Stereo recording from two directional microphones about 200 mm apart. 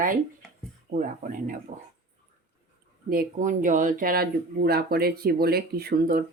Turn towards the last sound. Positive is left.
turn(degrees=-50)  # may be behind; listen again after turning